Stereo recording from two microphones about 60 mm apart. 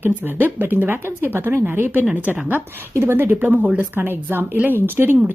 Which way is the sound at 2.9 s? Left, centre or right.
Right.